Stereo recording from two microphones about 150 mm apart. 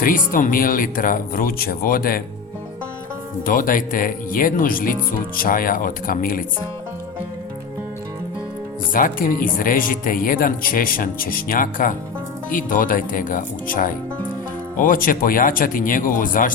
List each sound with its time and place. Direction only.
0.0 s speech: 70° left (ahead or behind)
3.4 s speech: 65° left (ahead or behind)
8.9 s speech: 70° left (ahead or behind)